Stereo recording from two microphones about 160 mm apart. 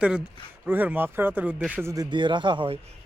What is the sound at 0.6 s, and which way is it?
Speech, 10° right (ahead or behind).